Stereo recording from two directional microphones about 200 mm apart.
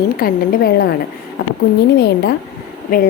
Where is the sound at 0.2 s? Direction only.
50° left (ahead or behind).